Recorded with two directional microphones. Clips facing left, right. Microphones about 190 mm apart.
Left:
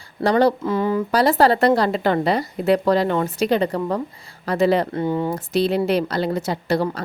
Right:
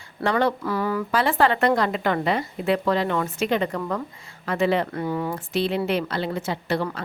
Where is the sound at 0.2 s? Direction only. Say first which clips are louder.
Left 5 dB; 35° left (ahead or behind).